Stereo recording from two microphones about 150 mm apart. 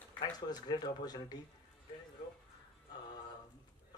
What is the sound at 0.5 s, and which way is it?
Speech, 25° left (ahead or behind).